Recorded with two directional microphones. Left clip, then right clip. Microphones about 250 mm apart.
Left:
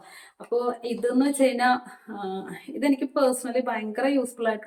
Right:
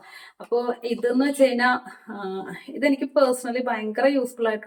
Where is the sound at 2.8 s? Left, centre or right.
Centre.